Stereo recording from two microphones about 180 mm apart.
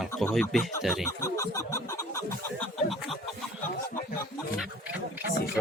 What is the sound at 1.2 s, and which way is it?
Music, 15° left (ahead or behind).